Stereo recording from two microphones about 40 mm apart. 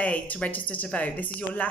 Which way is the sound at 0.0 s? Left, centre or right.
Left.